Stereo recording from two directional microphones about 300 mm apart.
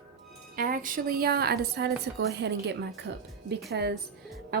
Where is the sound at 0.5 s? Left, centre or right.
Right.